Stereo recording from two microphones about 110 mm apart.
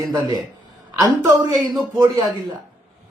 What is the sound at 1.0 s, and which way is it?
Speech, 35° right (ahead or behind).